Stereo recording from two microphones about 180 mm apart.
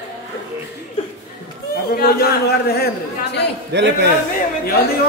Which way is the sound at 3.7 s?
70° right (ahead or behind).